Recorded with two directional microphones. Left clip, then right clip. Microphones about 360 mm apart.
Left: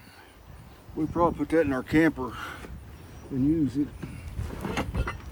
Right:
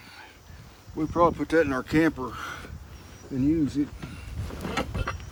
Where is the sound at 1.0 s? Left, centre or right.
Centre.